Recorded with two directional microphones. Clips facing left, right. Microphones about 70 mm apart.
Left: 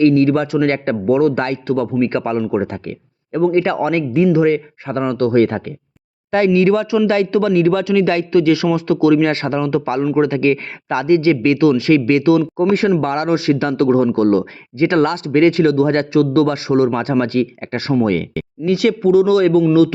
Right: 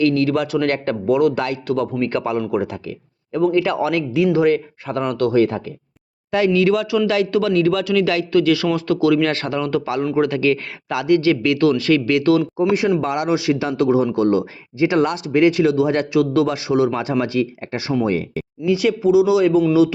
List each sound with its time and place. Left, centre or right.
0.1 s a man's voice: left
2.6 s speech: left
3.3 s a man's voice: left
4.3 s a man's voice: left
5.4 s speech: left
6.3 s a man's voice: left
12.5 s a man's voice: left
18.0 s speech: left